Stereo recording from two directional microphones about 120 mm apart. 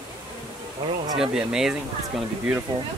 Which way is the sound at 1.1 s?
5° right (ahead or behind).